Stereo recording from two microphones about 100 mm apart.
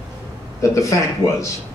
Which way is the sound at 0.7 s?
30° left (ahead or behind).